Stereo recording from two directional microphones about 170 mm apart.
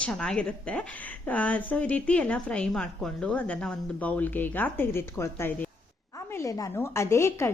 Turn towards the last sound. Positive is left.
turn(degrees=15)  # may be behind; listen again after turning